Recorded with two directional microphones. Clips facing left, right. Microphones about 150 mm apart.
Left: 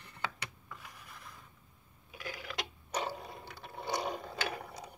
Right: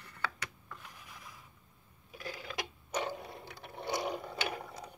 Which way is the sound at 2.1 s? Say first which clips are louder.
Even; 30° right (ahead or behind).